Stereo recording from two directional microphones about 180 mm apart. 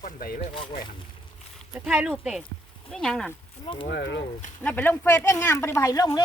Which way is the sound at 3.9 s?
75° left (ahead or behind).